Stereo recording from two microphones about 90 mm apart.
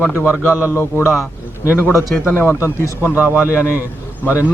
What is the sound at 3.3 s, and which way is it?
Speech, 20° right (ahead or behind).